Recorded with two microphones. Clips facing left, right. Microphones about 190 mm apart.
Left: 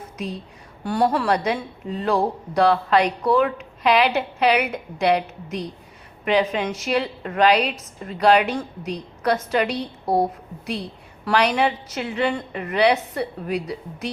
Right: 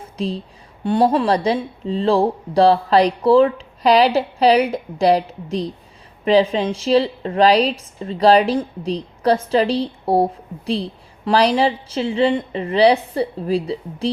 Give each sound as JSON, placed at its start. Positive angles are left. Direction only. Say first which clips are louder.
{"t": 0.2, "sound": "speech", "louder": "right 7 dB", "side_deg": -30}
{"t": 11.3, "sound": "a woman's voice", "louder": "right 4 dB", "side_deg": -30}